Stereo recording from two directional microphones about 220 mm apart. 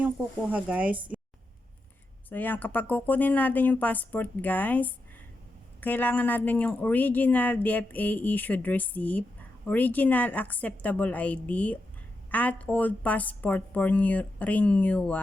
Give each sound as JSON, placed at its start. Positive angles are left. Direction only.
{"t": 0.5, "sound": "speech", "side_deg": -5}
{"t": 2.3, "sound": "speech", "side_deg": 10}